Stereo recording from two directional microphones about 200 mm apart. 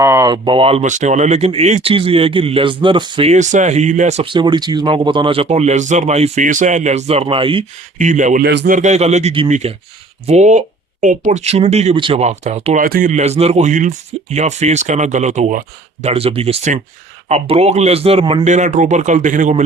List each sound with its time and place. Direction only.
0.0 s speech: 15° right (ahead or behind)
7.9 s speech: 40° right (ahead or behind)
8.4 s a man's voice: 55° right (ahead or behind)
8.7 s speech: 35° right (ahead or behind)
12.8 s speech: 45° right (ahead or behind)